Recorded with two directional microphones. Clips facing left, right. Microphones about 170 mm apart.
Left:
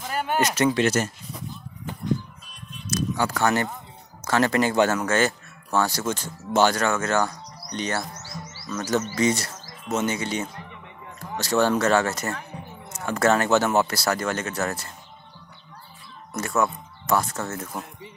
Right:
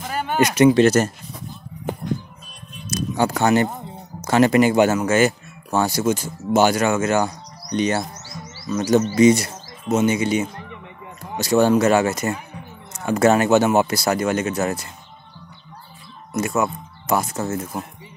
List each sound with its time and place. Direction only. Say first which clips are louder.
0.1 s a sound: right 1 dB; 5° left (ahead or behind)
0.4 s speech: right 8 dB; 15° right (ahead or behind)
0.7 s speech: right 7 dB; 40° right (ahead or behind)
3.2 s speech: right 7 dB; 20° right (ahead or behind)
16.3 s speech: right 3 dB; 15° right (ahead or behind)